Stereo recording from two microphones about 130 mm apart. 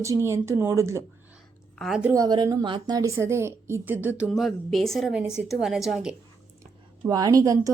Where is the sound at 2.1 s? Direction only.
30° right (ahead or behind); by 4.4 s 10° right (ahead or behind).